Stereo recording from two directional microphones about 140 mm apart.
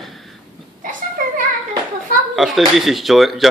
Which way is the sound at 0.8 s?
70° right (ahead or behind).